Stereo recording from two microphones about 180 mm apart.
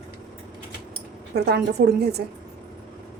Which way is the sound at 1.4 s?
60° right (ahead or behind).